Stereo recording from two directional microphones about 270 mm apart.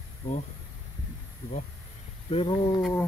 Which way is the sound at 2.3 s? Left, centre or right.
Centre.